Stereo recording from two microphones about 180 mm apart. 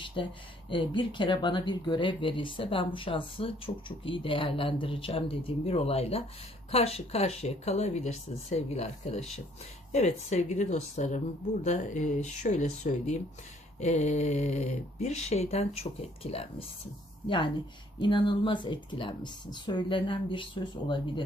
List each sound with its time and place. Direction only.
0.2 s speech: 30° left (ahead or behind)